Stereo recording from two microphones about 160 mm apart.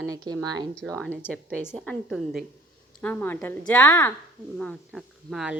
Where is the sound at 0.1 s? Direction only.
25° right (ahead or behind).